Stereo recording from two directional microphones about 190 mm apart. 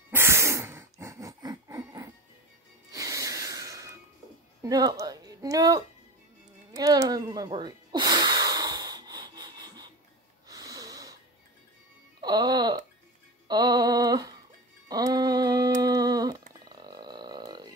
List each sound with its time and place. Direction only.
0.1 s snort: 15° right (ahead or behind)
2.9 s music: 20° right (ahead or behind)
4.6 s speech: 20° right (ahead or behind)
6.7 s a sound: 20° right (ahead or behind)
10.5 s snort: 20° right (ahead or behind)
12.2 s speech: 20° right (ahead or behind)
13.5 s a sound: 20° right (ahead or behind)
16.6 s roaring cats: 20° right (ahead or behind)